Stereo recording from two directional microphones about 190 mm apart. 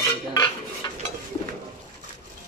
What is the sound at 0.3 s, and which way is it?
Cutlery, 20° left (ahead or behind).